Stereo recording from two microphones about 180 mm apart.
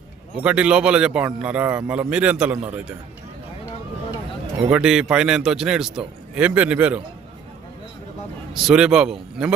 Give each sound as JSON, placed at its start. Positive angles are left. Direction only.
{"t": 0.4, "sound": "a man's voice", "side_deg": -5}
{"t": 4.7, "sound": "a man's voice", "side_deg": -5}
{"t": 8.5, "sound": "a man's voice", "side_deg": -5}